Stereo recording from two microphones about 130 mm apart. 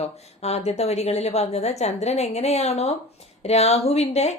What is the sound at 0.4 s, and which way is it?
A woman's voice, 55° left (ahead or behind).